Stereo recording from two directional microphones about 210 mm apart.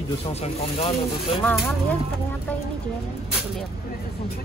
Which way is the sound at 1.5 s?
Centre (ahead or behind).